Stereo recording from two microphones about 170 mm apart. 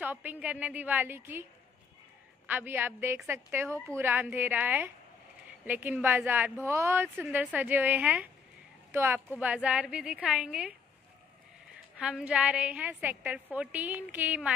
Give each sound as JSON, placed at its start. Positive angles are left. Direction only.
{"t": 0.0, "sound": "a woman's voice", "side_deg": -10}
{"t": 12.0, "sound": "a woman's voice", "side_deg": -5}